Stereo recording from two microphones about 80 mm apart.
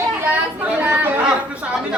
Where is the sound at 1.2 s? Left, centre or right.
Centre.